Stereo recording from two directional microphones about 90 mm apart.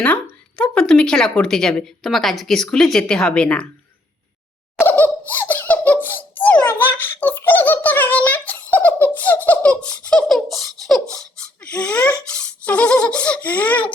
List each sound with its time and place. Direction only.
0.0 s speech: 15° left (ahead or behind)
4.8 s laughter: 20° left (ahead or behind)
5.3 s giggle: 20° left (ahead or behind); by 11.0 s 5° left (ahead or behind)
11.1 s a sound: 10° left (ahead or behind)
12.3 s toothbrush: 10° left (ahead or behind)